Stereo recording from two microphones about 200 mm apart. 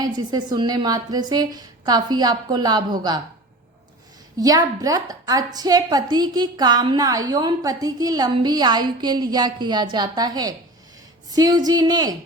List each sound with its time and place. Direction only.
0.0 s a woman's voice: 20° right (ahead or behind)
4.4 s a woman's voice: 20° right (ahead or behind)